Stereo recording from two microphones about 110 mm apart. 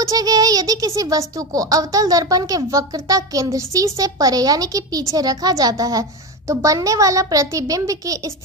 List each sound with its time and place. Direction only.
0.0 s speech: 35° right (ahead or behind)